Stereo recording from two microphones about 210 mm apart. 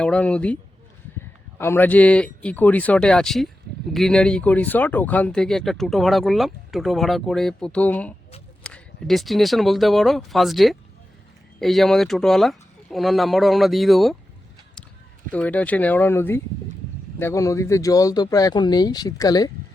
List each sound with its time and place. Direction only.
0.0 s speech: 5° left (ahead or behind)
15.3 s speech: 5° left (ahead or behind)